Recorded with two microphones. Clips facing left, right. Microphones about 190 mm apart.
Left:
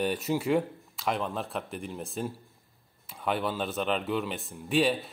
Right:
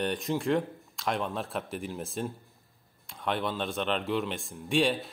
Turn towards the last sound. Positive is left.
turn(degrees=0)  # may be behind; listen again after turning